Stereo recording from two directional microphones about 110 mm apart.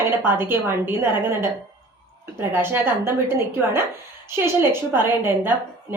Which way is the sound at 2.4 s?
20° right (ahead or behind).